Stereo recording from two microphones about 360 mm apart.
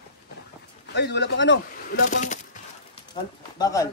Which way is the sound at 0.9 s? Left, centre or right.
Left.